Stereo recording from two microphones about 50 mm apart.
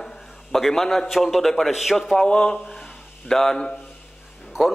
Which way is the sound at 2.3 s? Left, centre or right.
Left.